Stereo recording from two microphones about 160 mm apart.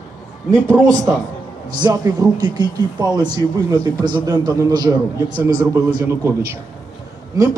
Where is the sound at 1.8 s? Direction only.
25° right (ahead or behind).